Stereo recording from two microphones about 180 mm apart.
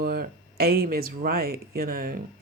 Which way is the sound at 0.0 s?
55° right (ahead or behind).